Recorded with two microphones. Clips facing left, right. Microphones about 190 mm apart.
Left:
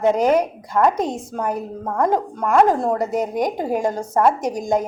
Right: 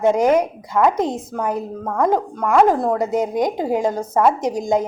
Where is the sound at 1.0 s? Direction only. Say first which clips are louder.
Right 2 dB; 15° left (ahead or behind).